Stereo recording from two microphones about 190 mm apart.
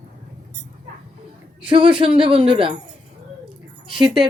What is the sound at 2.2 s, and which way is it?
Speech, 25° right (ahead or behind).